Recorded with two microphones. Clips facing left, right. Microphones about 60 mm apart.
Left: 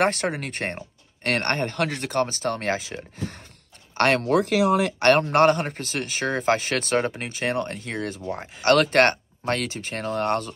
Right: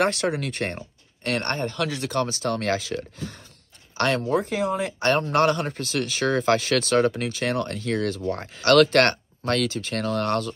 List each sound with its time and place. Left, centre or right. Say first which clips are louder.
0.0 s speech: even; left
1.2 s speech: left 2 dB; left
3.9 s speech: left 3 dB; left
5.2 s speech: left 2 dB; left
8.2 s speech: right 3 dB; centre
8.5 s speech: right 1 dB; left